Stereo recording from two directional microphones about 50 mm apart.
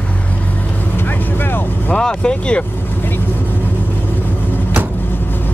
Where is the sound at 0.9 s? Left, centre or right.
Left.